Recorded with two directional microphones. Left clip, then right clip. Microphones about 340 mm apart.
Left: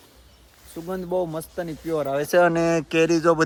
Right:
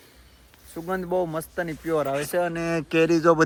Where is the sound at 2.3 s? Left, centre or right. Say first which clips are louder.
Left 7 dB; centre.